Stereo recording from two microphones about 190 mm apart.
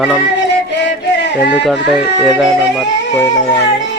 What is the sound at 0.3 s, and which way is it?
Music, 70° left (ahead or behind).